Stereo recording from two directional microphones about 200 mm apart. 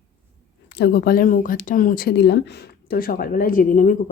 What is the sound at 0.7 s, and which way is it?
Speech, 55° left (ahead or behind).